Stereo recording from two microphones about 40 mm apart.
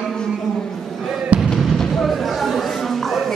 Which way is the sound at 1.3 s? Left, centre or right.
Right.